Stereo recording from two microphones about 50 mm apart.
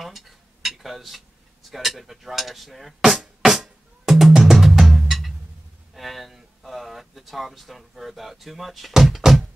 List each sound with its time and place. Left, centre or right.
0.7 s a sound: centre
1.7 s speech: centre
3.1 s music: centre
4.3 s music: centre
4.6 s drum: centre
5.9 s speech: centre